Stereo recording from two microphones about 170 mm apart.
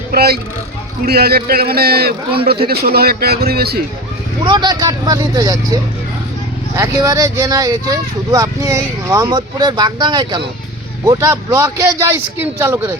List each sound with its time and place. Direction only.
0.1 s a man's voice: 65° right (ahead or behind)
4.4 s speech: 25° right (ahead or behind)